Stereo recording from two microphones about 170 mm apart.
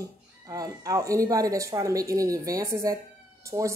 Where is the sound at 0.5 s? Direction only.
20° right (ahead or behind).